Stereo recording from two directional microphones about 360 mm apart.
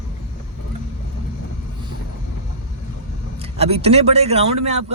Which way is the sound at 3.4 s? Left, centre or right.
Centre.